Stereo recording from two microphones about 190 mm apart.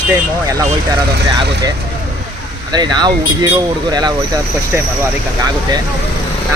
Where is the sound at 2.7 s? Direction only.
20° right (ahead or behind).